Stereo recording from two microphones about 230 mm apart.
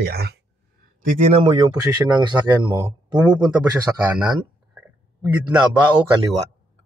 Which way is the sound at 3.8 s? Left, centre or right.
Centre.